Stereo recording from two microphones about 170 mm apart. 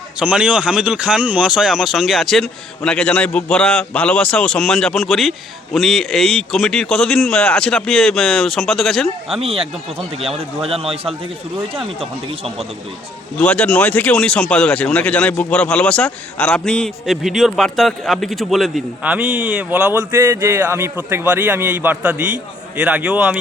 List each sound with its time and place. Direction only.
0.2 s speech: 5° right (ahead or behind)
9.4 s a man's voice: 35° right (ahead or behind)
13.4 s a man's voice: 5° left (ahead or behind)